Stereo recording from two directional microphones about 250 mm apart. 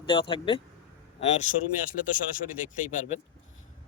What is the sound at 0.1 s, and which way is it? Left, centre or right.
Speech, centre.